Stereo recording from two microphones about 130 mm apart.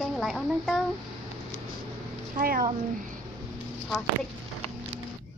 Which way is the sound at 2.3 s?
90° right.